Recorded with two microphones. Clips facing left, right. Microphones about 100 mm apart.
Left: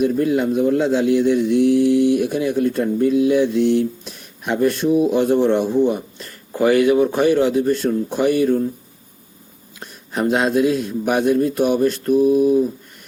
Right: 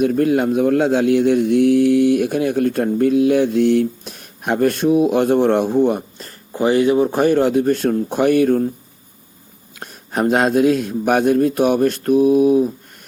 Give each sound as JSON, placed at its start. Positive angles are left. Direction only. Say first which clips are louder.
{"t": 0.0, "sound": "a man's voice", "louder": "right 2 dB", "side_deg": -55}
{"t": 6.5, "sound": "a man's voice", "louder": "left 1 dB", "side_deg": -25}
{"t": 9.8, "sound": "a man's voice", "louder": "right 2 dB", "side_deg": -50}